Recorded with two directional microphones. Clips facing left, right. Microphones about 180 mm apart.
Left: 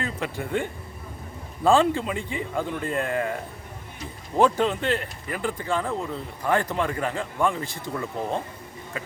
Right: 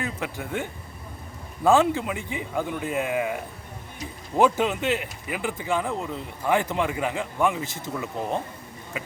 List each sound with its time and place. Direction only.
0.0 s speech: 5° right (ahead or behind)
7.6 s speech: 20° right (ahead or behind)